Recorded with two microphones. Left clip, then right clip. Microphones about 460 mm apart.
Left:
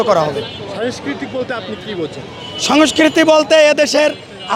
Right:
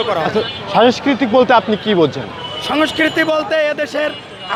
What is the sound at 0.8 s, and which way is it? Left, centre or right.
Speech, right.